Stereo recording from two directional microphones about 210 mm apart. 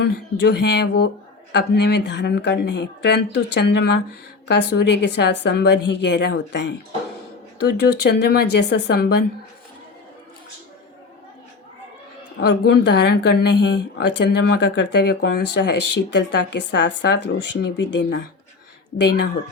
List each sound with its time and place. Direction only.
0.0 s speech: 55° left (ahead or behind)
12.4 s speech: 50° left (ahead or behind)